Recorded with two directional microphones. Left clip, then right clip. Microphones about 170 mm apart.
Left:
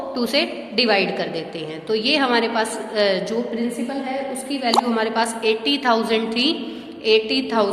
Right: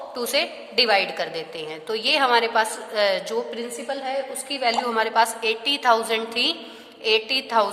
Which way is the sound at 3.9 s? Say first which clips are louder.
Left 1 dB; 50° right (ahead or behind).